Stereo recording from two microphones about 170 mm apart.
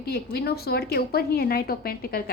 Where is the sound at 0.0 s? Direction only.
70° left (ahead or behind).